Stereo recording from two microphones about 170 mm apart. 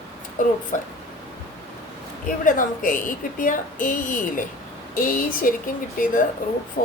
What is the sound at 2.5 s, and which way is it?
Speech, 50° left (ahead or behind).